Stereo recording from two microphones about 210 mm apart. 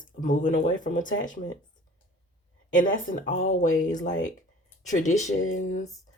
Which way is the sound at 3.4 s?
35° left (ahead or behind).